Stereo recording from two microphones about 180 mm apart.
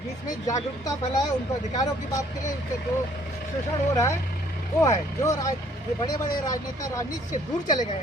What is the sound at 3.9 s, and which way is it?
Speech, 15° left (ahead or behind).